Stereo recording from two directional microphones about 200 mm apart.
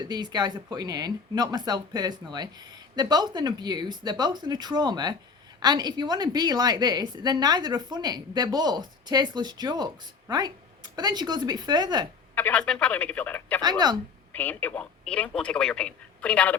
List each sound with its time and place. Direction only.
0.0 s a woman's voice: 20° right (ahead or behind)
12.3 s speech: 10° left (ahead or behind)
13.6 s a woman's voice: 20° right (ahead or behind)
14.3 s speech: 10° left (ahead or behind)